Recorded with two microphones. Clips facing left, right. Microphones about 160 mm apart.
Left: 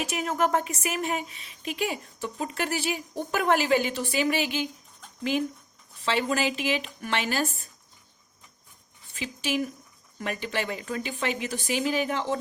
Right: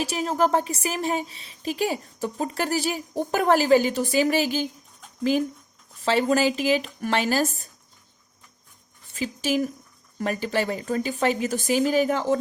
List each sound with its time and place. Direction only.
0.0 s a woman's voice: 30° right (ahead or behind)
6.1 s a woman's voice: 40° right (ahead or behind)
9.1 s a woman's voice: 40° right (ahead or behind)